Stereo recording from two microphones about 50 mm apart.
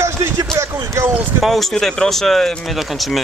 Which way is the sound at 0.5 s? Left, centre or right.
Right.